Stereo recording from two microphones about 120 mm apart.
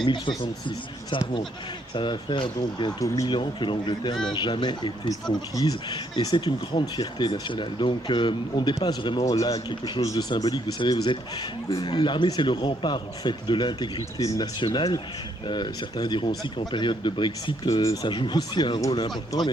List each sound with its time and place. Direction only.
0.0 s speech: 40° left (ahead or behind)
2.0 s speech: 40° left (ahead or behind)